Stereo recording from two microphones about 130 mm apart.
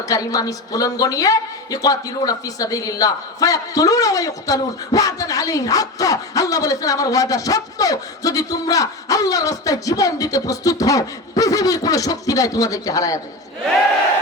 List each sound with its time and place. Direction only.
0.0 s a woman's voice: 25° left (ahead or behind)